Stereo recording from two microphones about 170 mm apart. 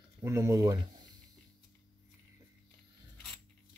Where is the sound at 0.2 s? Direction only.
20° right (ahead or behind).